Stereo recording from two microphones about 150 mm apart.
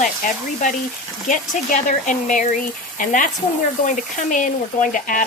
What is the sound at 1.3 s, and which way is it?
Speech, 60° left (ahead or behind).